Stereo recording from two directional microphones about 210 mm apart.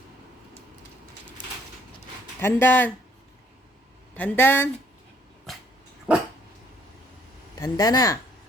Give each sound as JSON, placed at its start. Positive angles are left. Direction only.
{"t": 2.4, "sound": "speech", "side_deg": 10}
{"t": 4.1, "sound": "speech", "side_deg": 10}
{"t": 7.6, "sound": "speech", "side_deg": 20}